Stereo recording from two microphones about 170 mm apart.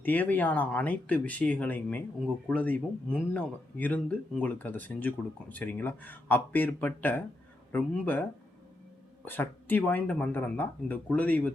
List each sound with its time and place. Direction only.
0.0 s speech: 10° left (ahead or behind)